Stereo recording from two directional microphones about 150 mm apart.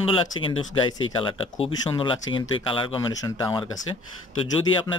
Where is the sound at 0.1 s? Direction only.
35° left (ahead or behind).